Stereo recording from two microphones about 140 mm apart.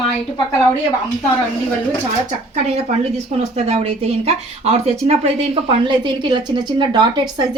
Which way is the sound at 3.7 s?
45° right (ahead or behind).